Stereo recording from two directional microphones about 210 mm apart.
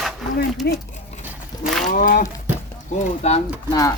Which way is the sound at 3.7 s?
15° left (ahead or behind).